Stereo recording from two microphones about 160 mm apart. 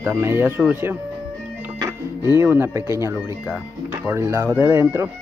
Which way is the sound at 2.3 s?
15° right (ahead or behind).